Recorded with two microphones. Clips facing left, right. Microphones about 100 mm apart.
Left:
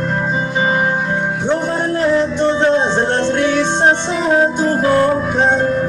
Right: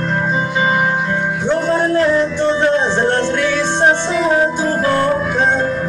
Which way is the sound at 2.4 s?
20° left (ahead or behind).